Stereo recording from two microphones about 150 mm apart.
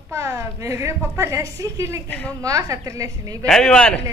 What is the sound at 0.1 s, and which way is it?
A woman's voice, 20° right (ahead or behind).